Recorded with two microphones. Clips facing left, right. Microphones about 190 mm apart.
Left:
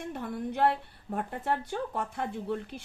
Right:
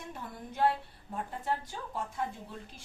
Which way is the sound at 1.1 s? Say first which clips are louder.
Left 4 dB; 60° left (ahead or behind).